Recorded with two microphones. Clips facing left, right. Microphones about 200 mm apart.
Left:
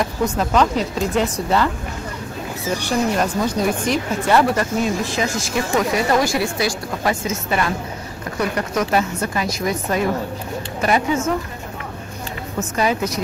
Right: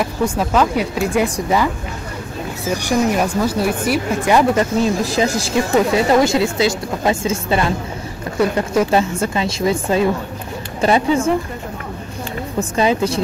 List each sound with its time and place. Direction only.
0.4 s speech: 5° right (ahead or behind)
2.8 s speech: 10° right (ahead or behind)
5.0 s speech: 35° right (ahead or behind)
5.7 s a woman's voice: 25° right (ahead or behind)
12.5 s a woman's voice: 30° right (ahead or behind)